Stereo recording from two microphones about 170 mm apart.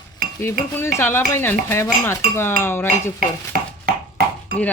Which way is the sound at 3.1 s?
60° right (ahead or behind).